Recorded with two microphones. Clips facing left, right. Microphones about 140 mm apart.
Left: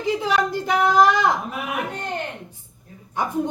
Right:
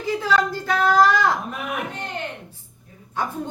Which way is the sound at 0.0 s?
20° left (ahead or behind).